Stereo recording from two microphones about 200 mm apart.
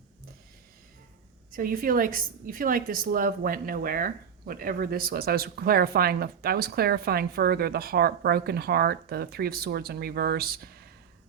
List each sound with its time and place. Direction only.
1.5 s a woman's voice: 45° right (ahead or behind)